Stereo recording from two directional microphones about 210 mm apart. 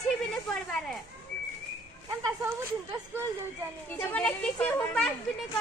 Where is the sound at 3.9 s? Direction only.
5° left (ahead or behind).